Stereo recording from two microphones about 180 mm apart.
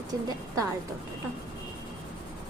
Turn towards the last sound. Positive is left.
turn(degrees=-20)  # may be behind; listen again after turning